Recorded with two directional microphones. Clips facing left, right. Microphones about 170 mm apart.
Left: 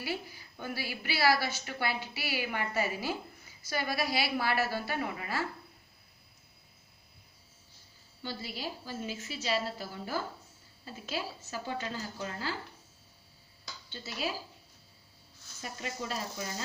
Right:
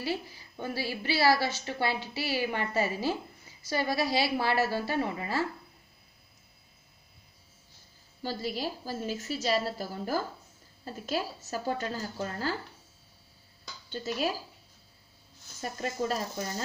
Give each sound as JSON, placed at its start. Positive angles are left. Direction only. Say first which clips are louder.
{"t": 0.0, "sound": "a woman's voice", "louder": "right 4 dB", "side_deg": -30}
{"t": 8.2, "sound": "a woman's voice", "louder": "right 6 dB", "side_deg": -40}
{"t": 13.8, "sound": "speech", "louder": "right 6 dB", "side_deg": -45}
{"t": 15.6, "sound": "a woman's voice", "louder": "right 7 dB", "side_deg": -45}